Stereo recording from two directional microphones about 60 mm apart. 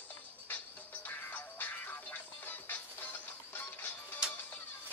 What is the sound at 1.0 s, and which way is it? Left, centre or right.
Music, left.